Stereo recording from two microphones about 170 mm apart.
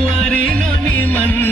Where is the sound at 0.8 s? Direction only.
10° left (ahead or behind).